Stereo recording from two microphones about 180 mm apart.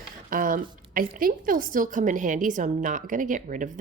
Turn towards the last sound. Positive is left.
turn(degrees=-45)  # may be behind; listen again after turning